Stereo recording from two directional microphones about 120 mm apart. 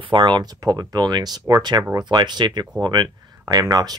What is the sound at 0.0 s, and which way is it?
Speech, 40° right (ahead or behind).